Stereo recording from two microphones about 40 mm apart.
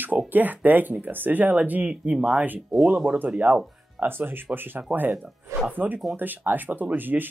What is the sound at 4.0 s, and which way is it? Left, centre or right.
Speech, right.